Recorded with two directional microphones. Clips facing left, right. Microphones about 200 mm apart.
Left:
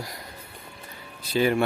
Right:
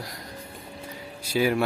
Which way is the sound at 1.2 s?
10° right (ahead or behind).